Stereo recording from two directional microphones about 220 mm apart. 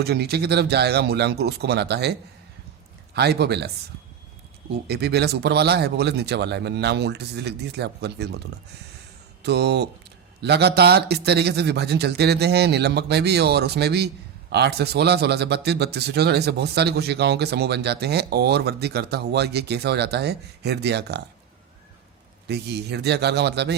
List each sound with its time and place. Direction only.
0.0 s a man's voice: 45° right (ahead or behind)
3.2 s a man's voice: 45° right (ahead or behind)
4.7 s a man's voice: 45° right (ahead or behind)
9.4 s a man's voice: 50° right (ahead or behind)
22.4 s a man's voice: 50° right (ahead or behind)